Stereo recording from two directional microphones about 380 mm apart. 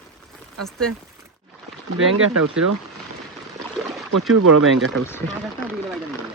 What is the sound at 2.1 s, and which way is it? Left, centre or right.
Speech, right.